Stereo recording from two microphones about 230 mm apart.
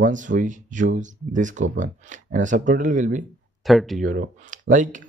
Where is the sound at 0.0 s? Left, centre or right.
Right.